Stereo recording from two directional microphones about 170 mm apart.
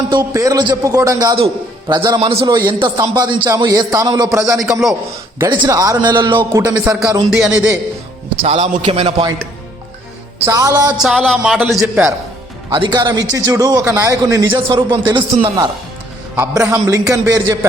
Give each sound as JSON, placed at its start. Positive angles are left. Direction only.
{"t": 0.1, "sound": "a man's voice", "side_deg": -20}
{"t": 4.5, "sound": "speech", "side_deg": 0}
{"t": 5.5, "sound": "a man's voice", "side_deg": -25}
{"t": 6.3, "sound": "a man's voice", "side_deg": -10}
{"t": 7.3, "sound": "speech", "side_deg": -5}
{"t": 8.4, "sound": "a man's voice", "side_deg": -35}
{"t": 10.3, "sound": "a man's voice", "side_deg": -15}
{"t": 10.9, "sound": "speech", "side_deg": -5}
{"t": 12.7, "sound": "a man's voice", "side_deg": -25}
{"t": 16.3, "sound": "a man's voice", "side_deg": -15}